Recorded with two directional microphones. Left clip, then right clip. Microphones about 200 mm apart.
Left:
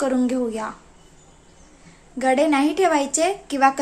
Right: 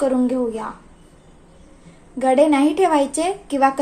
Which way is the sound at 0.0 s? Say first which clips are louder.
Right 3 dB; 20° left (ahead or behind).